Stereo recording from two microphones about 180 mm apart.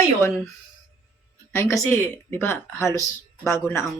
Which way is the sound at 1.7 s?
15° left (ahead or behind).